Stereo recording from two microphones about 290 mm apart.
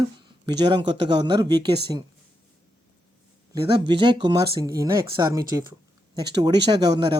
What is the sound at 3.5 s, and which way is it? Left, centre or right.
Speech, centre.